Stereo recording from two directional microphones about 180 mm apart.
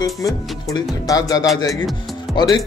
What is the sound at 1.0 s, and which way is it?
Music, 20° left (ahead or behind).